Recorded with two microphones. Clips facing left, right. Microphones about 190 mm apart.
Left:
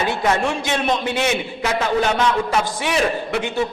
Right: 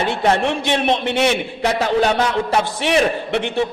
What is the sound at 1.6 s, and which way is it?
A man's voice, 35° right (ahead or behind).